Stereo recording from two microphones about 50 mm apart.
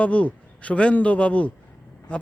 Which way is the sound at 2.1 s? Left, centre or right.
Left.